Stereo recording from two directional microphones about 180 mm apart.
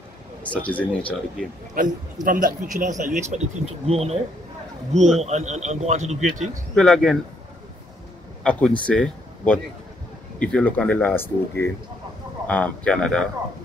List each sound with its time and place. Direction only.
0.5 s speech: 5° left (ahead or behind)
1.8 s speech: 50° right (ahead or behind); by 4.2 s 35° right (ahead or behind)
5.2 s speech: 40° right (ahead or behind)
6.7 s speech: 5° left (ahead or behind)
8.5 s speech: 5° left (ahead or behind)